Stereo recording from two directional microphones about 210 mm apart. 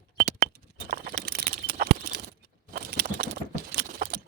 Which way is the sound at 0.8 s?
45° right (ahead or behind).